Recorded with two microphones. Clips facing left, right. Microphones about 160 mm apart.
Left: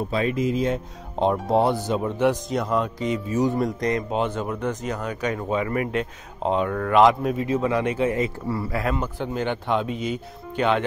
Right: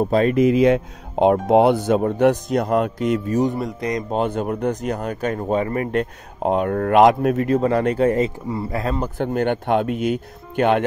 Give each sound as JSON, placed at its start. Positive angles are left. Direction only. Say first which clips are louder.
{"t": 0.0, "sound": "speech", "louder": "right 7 dB", "side_deg": -45}
{"t": 0.4, "sound": "speech", "louder": "right 8 dB", "side_deg": -70}
{"t": 1.1, "sound": "speech", "louder": "right 6 dB", "side_deg": -60}
{"t": 3.5, "sound": "speech", "louder": "left 1 dB", "side_deg": -5}
{"t": 4.1, "sound": "speech", "louder": "right 3 dB", "side_deg": -50}
{"t": 5.9, "sound": "speech", "louder": "right 4 dB", "side_deg": -50}
{"t": 7.5, "sound": "speech", "louder": "right 4 dB", "side_deg": -40}
{"t": 8.5, "sound": "speech", "louder": "right 1 dB", "side_deg": -25}
{"t": 9.2, "sound": "speech", "louder": "right 6 dB", "side_deg": -55}